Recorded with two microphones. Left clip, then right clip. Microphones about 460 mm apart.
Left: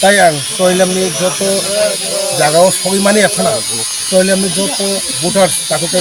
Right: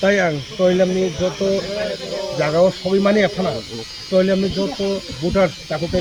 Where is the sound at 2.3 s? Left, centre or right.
Right.